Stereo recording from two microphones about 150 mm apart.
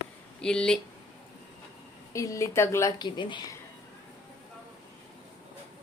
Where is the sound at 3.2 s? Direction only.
30° left (ahead or behind).